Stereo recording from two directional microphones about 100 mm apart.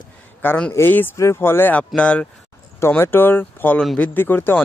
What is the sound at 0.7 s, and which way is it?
Speech, 20° left (ahead or behind).